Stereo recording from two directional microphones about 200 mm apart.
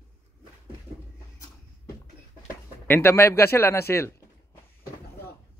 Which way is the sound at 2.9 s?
10° left (ahead or behind).